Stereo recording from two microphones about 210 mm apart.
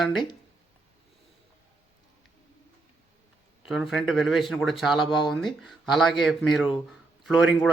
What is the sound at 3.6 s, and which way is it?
Speech, centre (ahead or behind).